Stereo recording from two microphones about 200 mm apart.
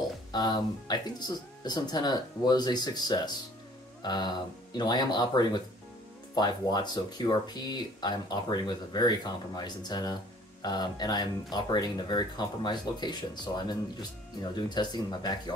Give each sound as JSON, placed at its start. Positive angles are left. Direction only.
{"t": 0.3, "sound": "speech", "side_deg": 20}